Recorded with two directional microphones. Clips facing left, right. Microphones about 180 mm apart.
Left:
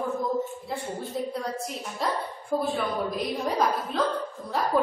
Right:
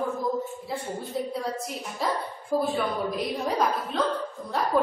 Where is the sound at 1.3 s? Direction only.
Centre (ahead or behind).